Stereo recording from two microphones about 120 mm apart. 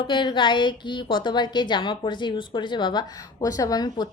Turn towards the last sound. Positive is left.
turn(degrees=35)  # may be behind; listen again after turning